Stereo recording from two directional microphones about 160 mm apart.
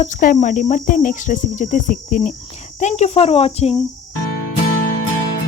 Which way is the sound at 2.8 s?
45° left (ahead or behind).